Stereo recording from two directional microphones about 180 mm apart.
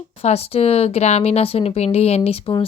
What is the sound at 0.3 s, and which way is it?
Speech, 35° left (ahead or behind).